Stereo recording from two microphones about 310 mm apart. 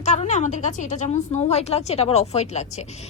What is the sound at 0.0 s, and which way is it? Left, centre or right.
A woman's voice, left.